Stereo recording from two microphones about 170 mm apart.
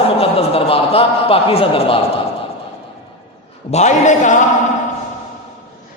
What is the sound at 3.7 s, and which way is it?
Speech, 45° left (ahead or behind).